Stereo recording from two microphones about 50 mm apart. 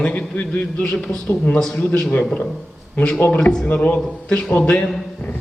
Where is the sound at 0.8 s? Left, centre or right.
Centre.